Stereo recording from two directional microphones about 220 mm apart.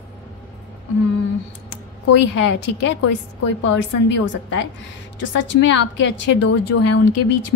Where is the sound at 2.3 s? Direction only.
55° left (ahead or behind).